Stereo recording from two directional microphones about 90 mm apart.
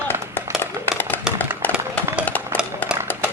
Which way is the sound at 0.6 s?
20° left (ahead or behind).